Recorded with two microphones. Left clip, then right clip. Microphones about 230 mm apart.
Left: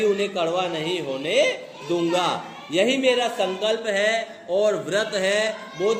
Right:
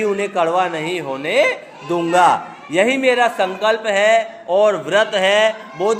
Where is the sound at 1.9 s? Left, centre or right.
Right.